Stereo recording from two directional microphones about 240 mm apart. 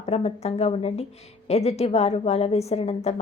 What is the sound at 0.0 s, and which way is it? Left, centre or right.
A woman's voice, left.